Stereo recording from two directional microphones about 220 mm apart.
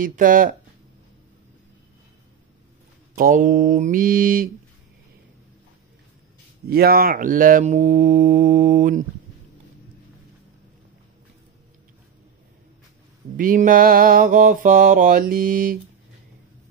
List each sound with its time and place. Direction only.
0.0 s mantra: 40° right (ahead or behind)
3.2 s mantra: 40° right (ahead or behind)
6.7 s mantra: 45° right (ahead or behind)
13.4 s mantra: 40° right (ahead or behind)